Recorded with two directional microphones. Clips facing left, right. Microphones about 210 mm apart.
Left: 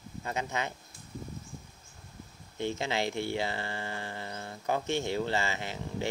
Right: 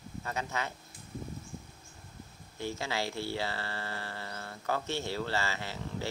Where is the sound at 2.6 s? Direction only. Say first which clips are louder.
Left 4 dB; 20° left (ahead or behind).